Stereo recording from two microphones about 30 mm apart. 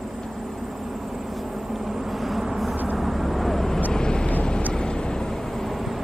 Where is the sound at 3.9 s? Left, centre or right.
Left.